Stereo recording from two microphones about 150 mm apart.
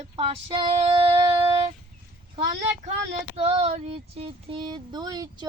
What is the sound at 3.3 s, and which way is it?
Female singing, 40° right (ahead or behind).